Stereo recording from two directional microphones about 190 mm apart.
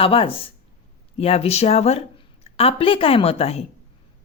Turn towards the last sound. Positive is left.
turn(degrees=30)  # may be behind; listen again after turning